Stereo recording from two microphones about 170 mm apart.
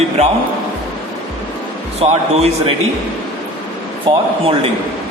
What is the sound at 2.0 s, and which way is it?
Speech, 40° right (ahead or behind).